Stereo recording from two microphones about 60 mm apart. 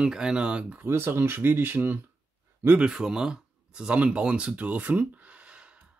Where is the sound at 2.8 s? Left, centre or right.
Centre.